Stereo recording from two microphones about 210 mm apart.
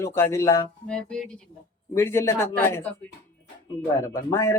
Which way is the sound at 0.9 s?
5° left (ahead or behind).